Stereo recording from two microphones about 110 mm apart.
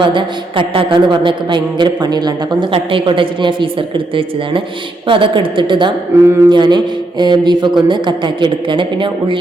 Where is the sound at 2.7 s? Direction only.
55° right (ahead or behind).